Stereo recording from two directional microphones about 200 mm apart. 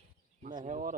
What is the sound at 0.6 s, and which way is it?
Speech, 40° right (ahead or behind).